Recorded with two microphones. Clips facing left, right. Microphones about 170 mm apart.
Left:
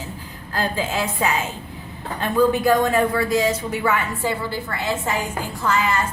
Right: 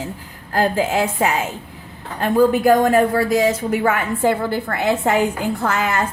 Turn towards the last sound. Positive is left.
turn(degrees=-60)  # may be behind; listen again after turning